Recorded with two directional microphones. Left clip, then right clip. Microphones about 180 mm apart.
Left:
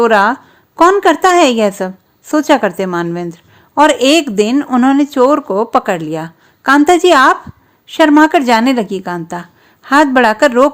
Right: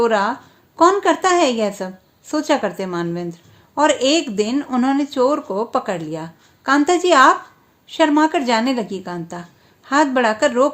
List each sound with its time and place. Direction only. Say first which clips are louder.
0.0 s a woman's voice: left 7 dB; 45° left (ahead or behind)